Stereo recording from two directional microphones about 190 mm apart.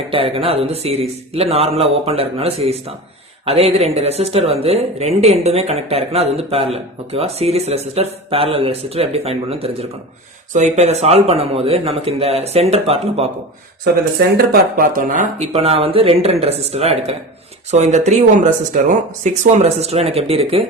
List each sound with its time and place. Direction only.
0.1 s speech: 30° right (ahead or behind)
14.3 s speech: 50° right (ahead or behind); by 20.7 s 30° right (ahead or behind)